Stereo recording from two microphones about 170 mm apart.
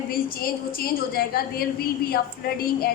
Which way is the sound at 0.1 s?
60° left (ahead or behind).